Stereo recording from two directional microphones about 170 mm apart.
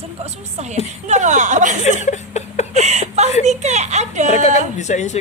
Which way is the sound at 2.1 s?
40° left (ahead or behind).